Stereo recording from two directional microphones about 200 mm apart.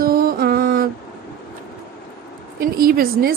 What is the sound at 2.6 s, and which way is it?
Speech, 45° right (ahead or behind).